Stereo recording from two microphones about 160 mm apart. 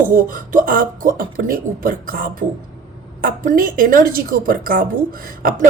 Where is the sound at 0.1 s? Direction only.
60° right (ahead or behind).